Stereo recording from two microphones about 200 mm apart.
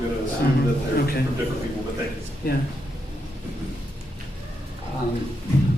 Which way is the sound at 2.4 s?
50° left (ahead or behind).